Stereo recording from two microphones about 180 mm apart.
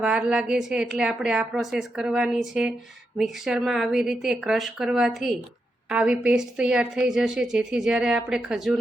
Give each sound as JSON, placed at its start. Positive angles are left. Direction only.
{"t": 0.0, "sound": "a woman's voice", "side_deg": -5}